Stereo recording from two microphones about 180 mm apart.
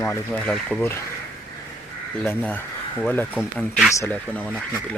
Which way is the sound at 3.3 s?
5° right (ahead or behind).